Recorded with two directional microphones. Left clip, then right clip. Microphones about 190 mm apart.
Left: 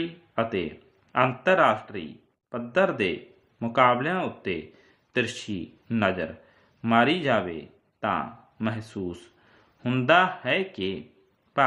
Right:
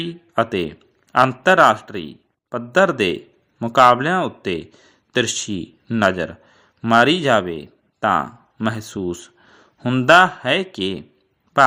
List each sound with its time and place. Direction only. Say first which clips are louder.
0.0 s speech: right 7 dB; 40° right (ahead or behind)